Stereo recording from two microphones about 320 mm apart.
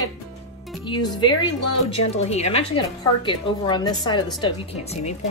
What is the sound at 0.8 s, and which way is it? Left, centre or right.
A woman's voice, centre.